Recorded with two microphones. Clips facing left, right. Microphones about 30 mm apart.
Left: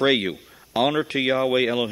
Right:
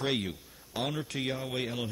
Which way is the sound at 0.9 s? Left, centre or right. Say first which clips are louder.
Left 12 dB; left.